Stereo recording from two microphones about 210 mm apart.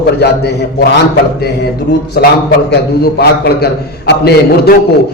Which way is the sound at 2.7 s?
50° left (ahead or behind).